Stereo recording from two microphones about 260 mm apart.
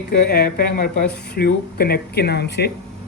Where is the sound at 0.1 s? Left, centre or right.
Left.